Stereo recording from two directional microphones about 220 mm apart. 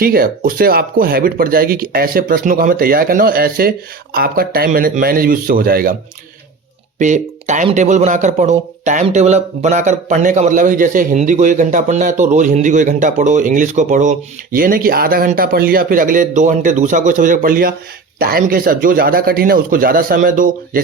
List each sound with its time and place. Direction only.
0.0 s speech: 40° right (ahead or behind)
7.0 s speech: 35° right (ahead or behind)